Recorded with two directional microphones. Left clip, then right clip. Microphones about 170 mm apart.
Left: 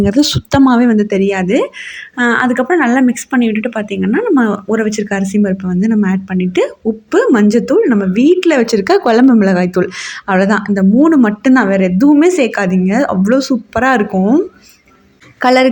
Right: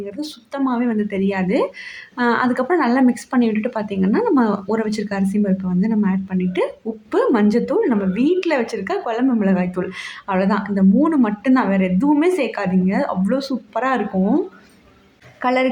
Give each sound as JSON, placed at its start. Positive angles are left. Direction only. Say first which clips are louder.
{"t": 0.0, "sound": "a woman's voice", "louder": "left 16 dB", "side_deg": 40}
{"t": 8.7, "sound": "a woman's voice", "louder": "left 12 dB", "side_deg": 35}
{"t": 15.4, "sound": "a woman's voice", "louder": "left 9 dB", "side_deg": 25}